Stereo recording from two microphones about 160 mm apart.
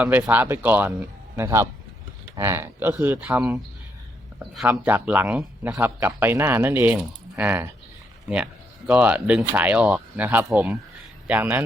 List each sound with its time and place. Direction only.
0.0 s speech: 10° right (ahead or behind)
4.7 s speech: 10° right (ahead or behind)
8.9 s speech: 10° right (ahead or behind)